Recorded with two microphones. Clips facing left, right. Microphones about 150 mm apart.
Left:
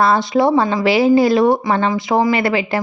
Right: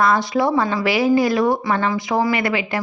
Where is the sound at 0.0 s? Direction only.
30° left (ahead or behind).